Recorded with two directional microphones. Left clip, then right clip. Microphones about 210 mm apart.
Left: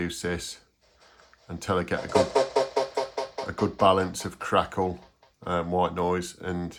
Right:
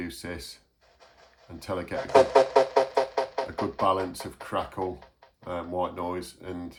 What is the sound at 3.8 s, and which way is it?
Speech, 30° left (ahead or behind).